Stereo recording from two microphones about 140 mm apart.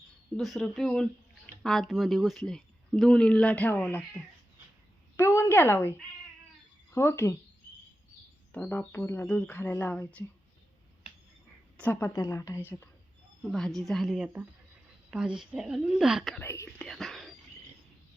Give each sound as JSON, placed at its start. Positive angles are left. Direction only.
{"t": 0.3, "sound": "a woman's voice", "side_deg": 0}
{"t": 8.5, "sound": "speech", "side_deg": 10}
{"t": 11.8, "sound": "a woman's voice", "side_deg": 15}
{"t": 13.5, "sound": "speech", "side_deg": 0}
{"t": 16.4, "sound": "whispering", "side_deg": 15}